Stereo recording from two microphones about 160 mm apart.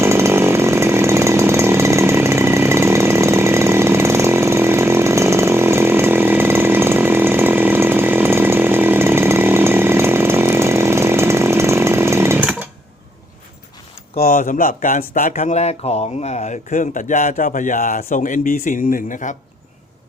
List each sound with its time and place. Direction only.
0.0 s chainsaw: 15° right (ahead or behind)
14.2 s speech: 55° left (ahead or behind)